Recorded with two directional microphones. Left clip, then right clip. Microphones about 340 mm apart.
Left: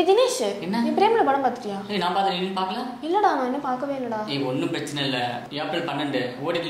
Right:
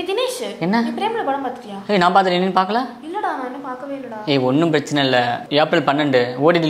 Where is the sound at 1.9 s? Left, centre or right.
Right.